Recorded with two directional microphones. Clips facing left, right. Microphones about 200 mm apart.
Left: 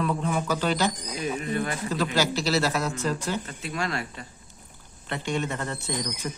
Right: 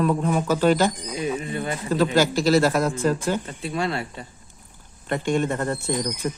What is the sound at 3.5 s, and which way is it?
Speech, 30° right (ahead or behind).